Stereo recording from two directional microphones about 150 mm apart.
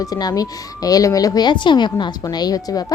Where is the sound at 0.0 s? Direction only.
25° left (ahead or behind).